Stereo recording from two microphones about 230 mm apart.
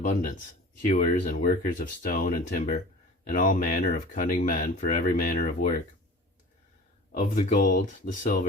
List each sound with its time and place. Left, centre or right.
0.0 s speech: left
7.1 s speech: left